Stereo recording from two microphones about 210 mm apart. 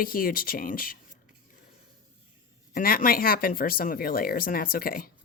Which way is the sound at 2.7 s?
45° left (ahead or behind).